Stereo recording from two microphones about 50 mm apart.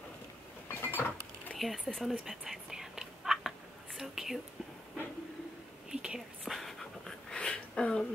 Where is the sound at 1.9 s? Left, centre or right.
Centre.